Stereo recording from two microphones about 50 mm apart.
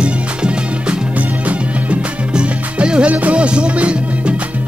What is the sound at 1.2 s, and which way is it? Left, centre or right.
Music, right.